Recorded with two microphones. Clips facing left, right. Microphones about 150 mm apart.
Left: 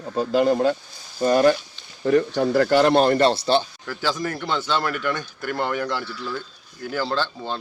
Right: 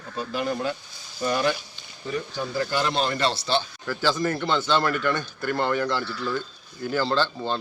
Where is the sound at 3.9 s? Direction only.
10° left (ahead or behind).